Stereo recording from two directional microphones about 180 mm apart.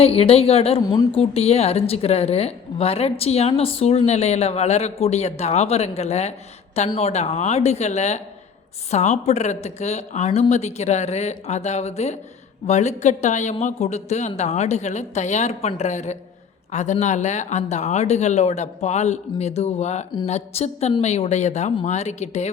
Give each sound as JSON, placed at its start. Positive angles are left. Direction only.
{"t": 0.0, "sound": "speech", "side_deg": 35}
{"t": 0.8, "sound": "speech", "side_deg": 20}